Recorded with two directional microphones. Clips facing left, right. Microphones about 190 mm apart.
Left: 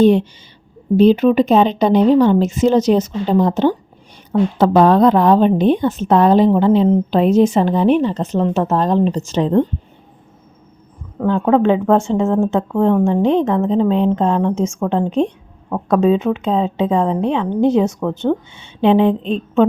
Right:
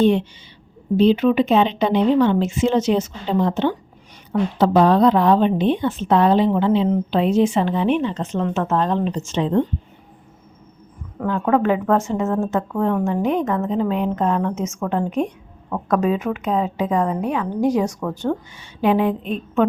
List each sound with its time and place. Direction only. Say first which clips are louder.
0.0 s a woman's voice: left 5 dB; 40° left (ahead or behind)
11.3 s speech: left 5 dB; 30° left (ahead or behind)